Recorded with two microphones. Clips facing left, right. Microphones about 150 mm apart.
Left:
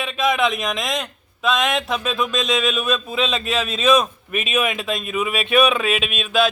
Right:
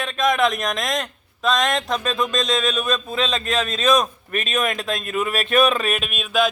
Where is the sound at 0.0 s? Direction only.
5° left (ahead or behind).